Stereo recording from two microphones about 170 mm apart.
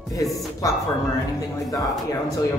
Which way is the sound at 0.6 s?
20° left (ahead or behind).